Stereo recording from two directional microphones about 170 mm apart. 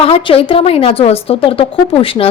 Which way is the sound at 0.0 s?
35° left (ahead or behind).